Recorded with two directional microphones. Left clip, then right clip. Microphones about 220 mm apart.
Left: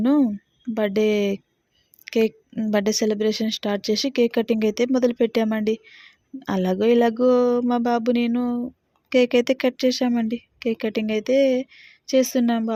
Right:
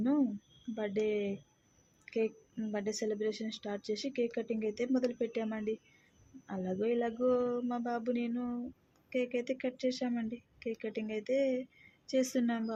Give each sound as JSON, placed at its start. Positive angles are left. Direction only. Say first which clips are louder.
{"t": 0.0, "sound": "a woman's voice", "louder": "left 12 dB", "side_deg": 45}